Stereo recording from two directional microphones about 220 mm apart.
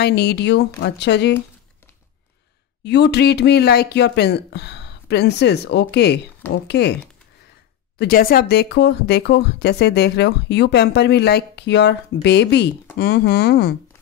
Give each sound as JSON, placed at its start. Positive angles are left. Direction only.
{"t": 0.0, "sound": "speech", "side_deg": 50}
{"t": 2.8, "sound": "speech", "side_deg": 50}
{"t": 8.0, "sound": "speech", "side_deg": 45}